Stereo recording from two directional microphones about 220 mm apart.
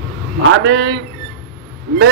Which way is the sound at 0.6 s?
50° right (ahead or behind).